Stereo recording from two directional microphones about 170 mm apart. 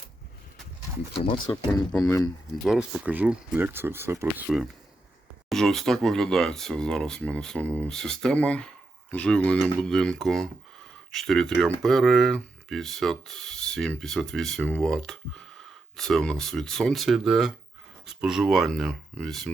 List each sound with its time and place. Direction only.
1.1 s speech: 30° left (ahead or behind)
1.9 s speech: 5° left (ahead or behind)